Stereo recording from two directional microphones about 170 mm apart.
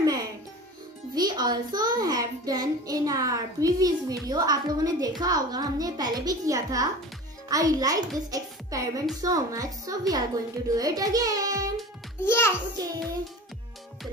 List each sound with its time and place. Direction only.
0.0 s music: 20° right (ahead or behind)
1.1 s a child's voice: 25° right (ahead or behind)
12.2 s a child's voice: 15° left (ahead or behind)
12.8 s a child's voice: 20° right (ahead or behind)